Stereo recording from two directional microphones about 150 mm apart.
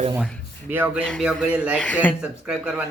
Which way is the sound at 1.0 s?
5° left (ahead or behind).